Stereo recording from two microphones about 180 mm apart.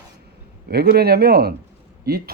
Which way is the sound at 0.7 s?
60° right (ahead or behind).